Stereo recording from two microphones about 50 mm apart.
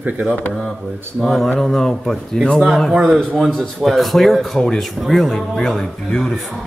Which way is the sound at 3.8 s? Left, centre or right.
Centre.